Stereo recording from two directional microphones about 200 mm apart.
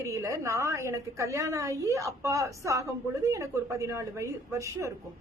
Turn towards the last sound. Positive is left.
turn(degrees=-15)  # may be behind; listen again after turning